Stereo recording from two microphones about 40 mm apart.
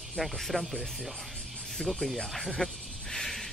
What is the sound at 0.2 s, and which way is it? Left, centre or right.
Speech, centre.